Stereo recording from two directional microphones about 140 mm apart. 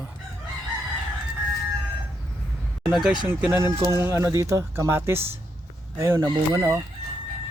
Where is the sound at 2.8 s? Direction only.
5° right (ahead or behind); by 6.8 s 25° right (ahead or behind).